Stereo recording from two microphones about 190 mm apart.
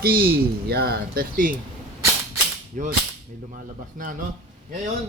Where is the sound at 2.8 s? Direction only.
40° right (ahead or behind).